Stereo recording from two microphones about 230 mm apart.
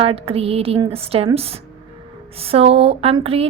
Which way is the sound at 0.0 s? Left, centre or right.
Right.